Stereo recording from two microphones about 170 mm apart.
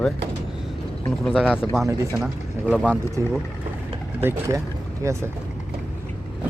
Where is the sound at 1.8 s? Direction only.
15° right (ahead or behind).